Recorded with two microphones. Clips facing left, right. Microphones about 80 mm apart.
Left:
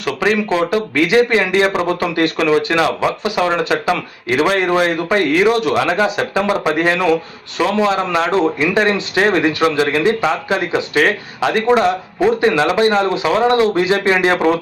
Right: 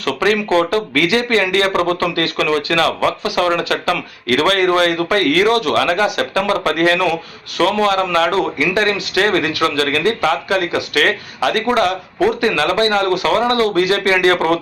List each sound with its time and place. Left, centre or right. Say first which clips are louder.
0.0 s speech: even; centre